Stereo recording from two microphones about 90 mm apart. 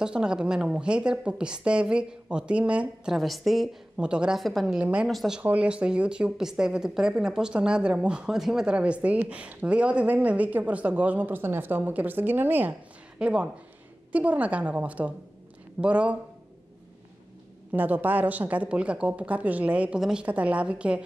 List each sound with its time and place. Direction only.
0.0 s speech: 10° right (ahead or behind)
3.2 s a woman's voice: centre (ahead or behind)
4.4 s a woman's voice: centre (ahead or behind)
5.4 s speech: 15° right (ahead or behind)
13.2 s speech: 10° right (ahead or behind)
17.7 s speech: 20° right (ahead or behind)